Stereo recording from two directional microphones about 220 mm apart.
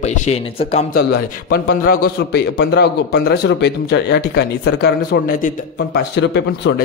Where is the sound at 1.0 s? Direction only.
50° left (ahead or behind).